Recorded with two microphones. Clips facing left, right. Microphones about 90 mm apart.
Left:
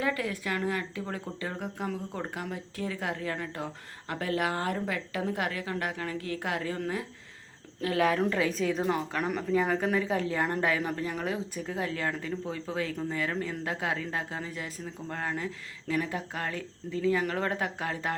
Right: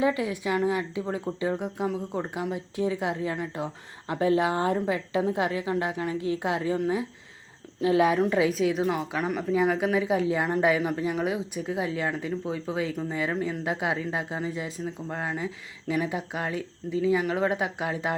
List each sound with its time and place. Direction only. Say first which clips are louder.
0.0 s a woman's voice: right 5 dB; 20° right (ahead or behind)